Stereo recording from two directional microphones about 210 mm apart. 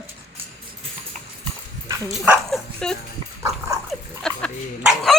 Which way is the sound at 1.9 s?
15° right (ahead or behind).